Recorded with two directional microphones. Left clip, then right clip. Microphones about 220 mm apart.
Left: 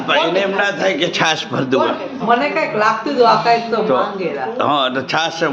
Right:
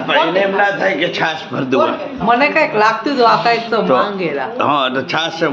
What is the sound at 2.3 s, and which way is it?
A man's voice, 45° right (ahead or behind).